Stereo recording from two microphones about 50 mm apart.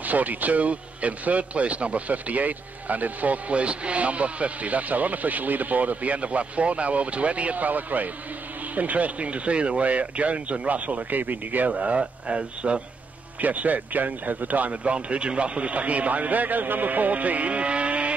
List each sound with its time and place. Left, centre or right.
0.0 s a man's voice: right
13.4 s a man's voice: right